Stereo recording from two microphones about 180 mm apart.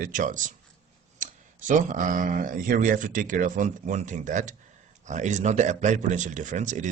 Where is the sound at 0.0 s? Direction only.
45° right (ahead or behind).